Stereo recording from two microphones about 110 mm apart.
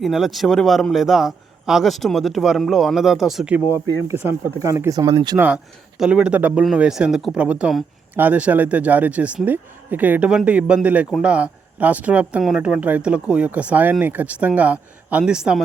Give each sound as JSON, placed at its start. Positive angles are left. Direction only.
{"t": 0.0, "sound": "a man's voice", "side_deg": 0}
{"t": 3.5, "sound": "speech", "side_deg": -25}
{"t": 6.0, "sound": "a man's voice", "side_deg": -10}